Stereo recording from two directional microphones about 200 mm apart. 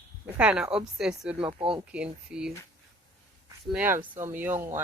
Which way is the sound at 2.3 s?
5° right (ahead or behind).